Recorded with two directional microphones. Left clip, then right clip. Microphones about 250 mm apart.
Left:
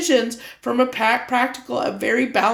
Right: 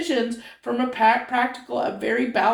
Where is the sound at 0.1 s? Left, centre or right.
Left.